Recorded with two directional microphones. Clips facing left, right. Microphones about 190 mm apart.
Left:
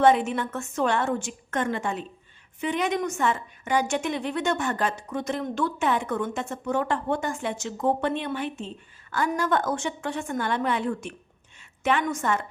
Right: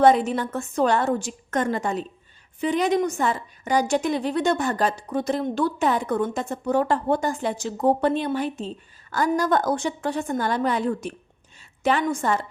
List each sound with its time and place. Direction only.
0.0 s a woman's voice: 35° right (ahead or behind)